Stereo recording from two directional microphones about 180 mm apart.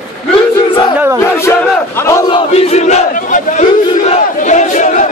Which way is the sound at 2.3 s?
35° left (ahead or behind).